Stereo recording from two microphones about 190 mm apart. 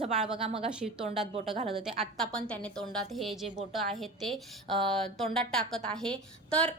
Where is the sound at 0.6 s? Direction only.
Centre (ahead or behind).